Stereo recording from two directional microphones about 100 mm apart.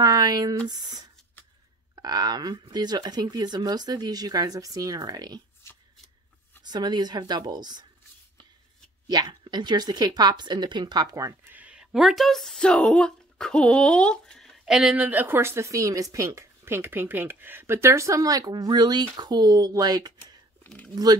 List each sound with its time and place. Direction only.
0.0 s speech: 40° right (ahead or behind)
6.6 s speech: 45° right (ahead or behind)
9.0 s speech: 45° right (ahead or behind)
11.4 s speech: 15° right (ahead or behind); by 14.6 s 5° left (ahead or behind)
14.6 s speech: 5° right (ahead or behind)
15.0 s speech: 20° right (ahead or behind); by 20.3 s 40° right (ahead or behind)
20.6 s a sound: 15° left (ahead or behind)
20.9 s speech: 40° right (ahead or behind)